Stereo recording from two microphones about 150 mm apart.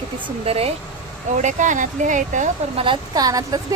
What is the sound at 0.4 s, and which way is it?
Speech, 40° right (ahead or behind).